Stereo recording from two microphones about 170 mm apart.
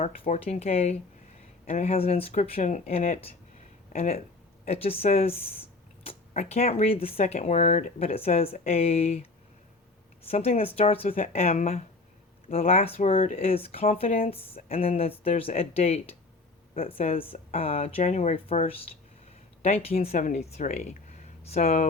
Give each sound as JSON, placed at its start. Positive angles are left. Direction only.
{"t": 0.0, "sound": "speech", "side_deg": 45}
{"t": 10.2, "sound": "speech", "side_deg": 35}
{"t": 16.7, "sound": "speech", "side_deg": 55}
{"t": 17.3, "sound": "speech", "side_deg": 35}